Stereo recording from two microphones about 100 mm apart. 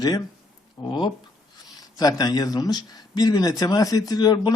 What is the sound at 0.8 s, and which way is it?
Speech, 45° left (ahead or behind).